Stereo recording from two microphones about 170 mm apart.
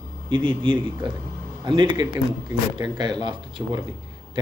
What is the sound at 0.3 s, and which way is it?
Speech, 30° right (ahead or behind).